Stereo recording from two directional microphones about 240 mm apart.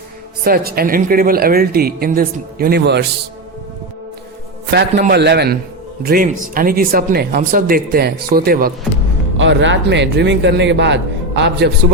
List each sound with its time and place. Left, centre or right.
0.4 s speech: right
4.7 s a man's voice: right
9.4 s a man's voice: right